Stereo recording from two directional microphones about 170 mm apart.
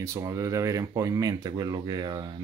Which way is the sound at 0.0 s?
20° right (ahead or behind).